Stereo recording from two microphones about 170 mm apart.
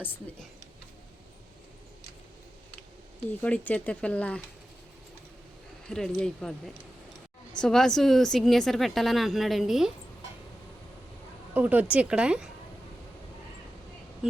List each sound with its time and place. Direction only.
3.4 s speech: 10° left (ahead or behind)
5.9 s a woman's voice: 5° left (ahead or behind)
7.5 s a woman's voice: 5° left (ahead or behind)
11.5 s a woman's voice: 10° right (ahead or behind)